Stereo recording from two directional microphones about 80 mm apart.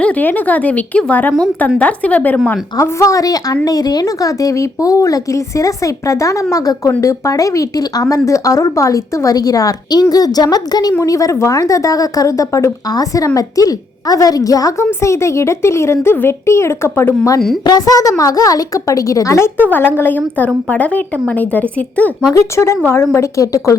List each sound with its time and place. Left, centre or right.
0.0 s a woman's voice: left
2.7 s a woman's voice: left
11.0 s a woman's voice: left
15.0 s speech: left
17.6 s a woman's voice: left
19.7 s a woman's voice: left
22.3 s a woman's voice: left